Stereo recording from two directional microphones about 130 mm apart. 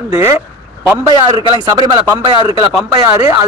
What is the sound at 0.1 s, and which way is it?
Speech, 20° right (ahead or behind).